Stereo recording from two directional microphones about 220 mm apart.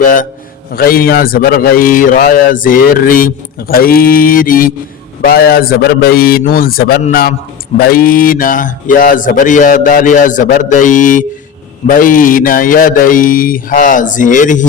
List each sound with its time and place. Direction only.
0.0 s a man's voice: 40° left (ahead or behind)